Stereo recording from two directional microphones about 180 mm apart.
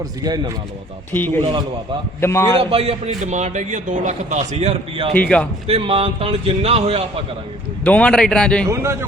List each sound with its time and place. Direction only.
0.2 s speech: 20° right (ahead or behind)
1.1 s a man's voice: 10° left (ahead or behind)
2.6 s a man's voice: 30° right (ahead or behind)
5.1 s a man's voice: 10° left (ahead or behind)
5.6 s a man's voice: 30° right (ahead or behind)
7.9 s speech: 5° left (ahead or behind)
8.7 s a man's voice: 15° right (ahead or behind)